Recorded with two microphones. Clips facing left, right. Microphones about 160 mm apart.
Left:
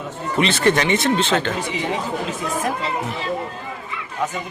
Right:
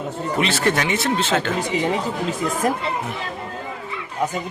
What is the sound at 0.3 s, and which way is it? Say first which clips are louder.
Speech: left 3 dB; 5° right (ahead or behind).